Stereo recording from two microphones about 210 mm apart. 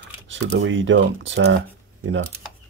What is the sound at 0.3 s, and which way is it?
Speech, 60° right (ahead or behind).